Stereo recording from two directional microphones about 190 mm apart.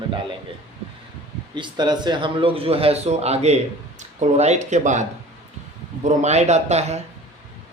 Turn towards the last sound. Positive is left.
turn(degrees=-35)  # may be behind; listen again after turning